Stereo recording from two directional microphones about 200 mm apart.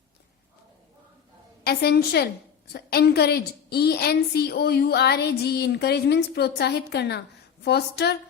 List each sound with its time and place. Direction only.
1.6 s a woman's voice: 50° left (ahead or behind)